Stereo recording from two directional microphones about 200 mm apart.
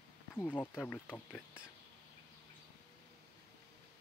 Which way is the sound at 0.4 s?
10° left (ahead or behind).